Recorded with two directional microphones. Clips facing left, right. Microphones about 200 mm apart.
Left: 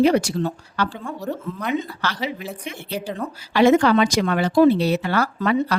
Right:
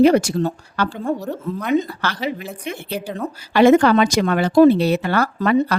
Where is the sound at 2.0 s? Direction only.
50° right (ahead or behind).